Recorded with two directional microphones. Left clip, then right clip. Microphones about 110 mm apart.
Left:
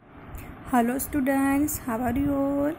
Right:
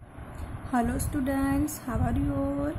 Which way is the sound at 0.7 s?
40° left (ahead or behind).